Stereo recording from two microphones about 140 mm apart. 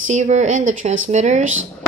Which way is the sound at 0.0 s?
55° right (ahead or behind).